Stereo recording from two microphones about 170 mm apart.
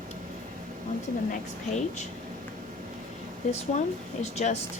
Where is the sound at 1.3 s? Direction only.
45° left (ahead or behind).